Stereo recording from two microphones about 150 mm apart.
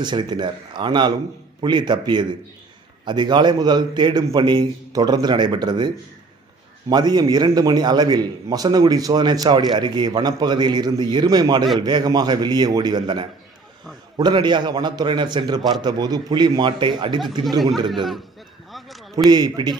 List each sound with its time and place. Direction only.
0.0 s a man's voice: 30° right (ahead or behind)
6.9 s a man's voice: 30° right (ahead or behind)
18.7 s a sound: centre (ahead or behind)
19.1 s a man's voice: 30° right (ahead or behind)